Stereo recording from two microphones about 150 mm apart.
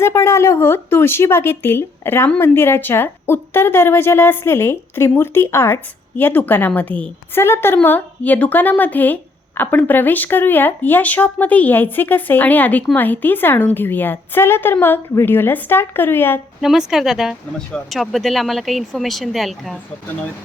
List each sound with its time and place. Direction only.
0.0 s speech: 20° left (ahead or behind)
16.6 s speech: 5° right (ahead or behind)